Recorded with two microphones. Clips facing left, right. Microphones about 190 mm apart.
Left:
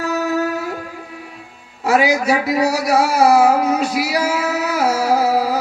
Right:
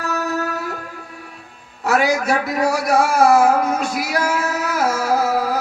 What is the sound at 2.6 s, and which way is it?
Speech, 45° right (ahead or behind).